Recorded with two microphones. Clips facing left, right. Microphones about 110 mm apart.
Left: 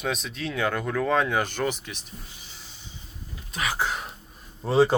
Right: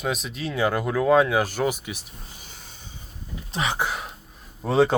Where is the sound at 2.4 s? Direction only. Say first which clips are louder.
Right 2 dB; 50° right (ahead or behind).